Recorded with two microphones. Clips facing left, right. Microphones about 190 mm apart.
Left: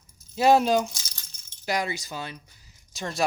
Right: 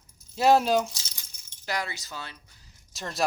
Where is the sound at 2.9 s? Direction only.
Centre (ahead or behind).